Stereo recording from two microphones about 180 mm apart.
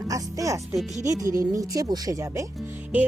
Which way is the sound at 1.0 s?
20° right (ahead or behind).